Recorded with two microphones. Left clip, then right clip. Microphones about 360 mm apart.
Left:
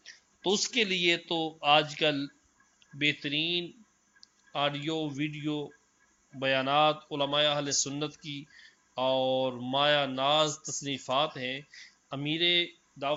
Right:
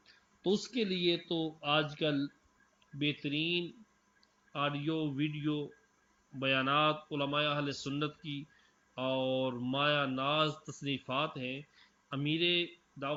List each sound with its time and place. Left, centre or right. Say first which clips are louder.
0.0 s speech: left 4 dB; centre
1.3 s speech: left 4 dB; left
1.6 s speech: left 8 dB; centre